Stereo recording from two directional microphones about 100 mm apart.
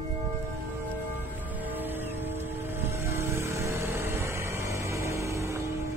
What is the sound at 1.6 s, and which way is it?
Music, 20° right (ahead or behind).